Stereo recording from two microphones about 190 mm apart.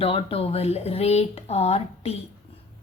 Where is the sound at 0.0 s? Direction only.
30° left (ahead or behind).